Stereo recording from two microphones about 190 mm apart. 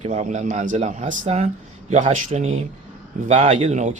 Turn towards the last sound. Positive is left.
turn(degrees=-40)  # may be behind; listen again after turning